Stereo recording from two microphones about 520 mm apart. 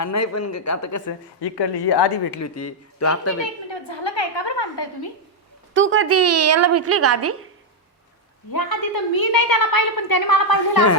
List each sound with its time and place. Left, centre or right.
0.0 s a woman's voice: left
1.4 s speech: left
2.4 s speech: left
3.7 s a sound: left
5.7 s a woman's voice: right
8.5 s a woman's voice: left